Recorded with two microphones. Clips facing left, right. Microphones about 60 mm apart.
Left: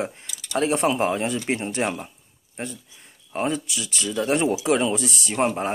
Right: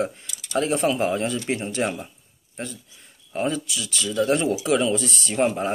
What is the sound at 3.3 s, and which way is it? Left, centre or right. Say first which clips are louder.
Speech: even; left.